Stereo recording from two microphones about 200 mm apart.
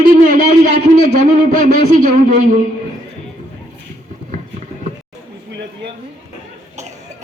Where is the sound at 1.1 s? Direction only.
35° right (ahead or behind).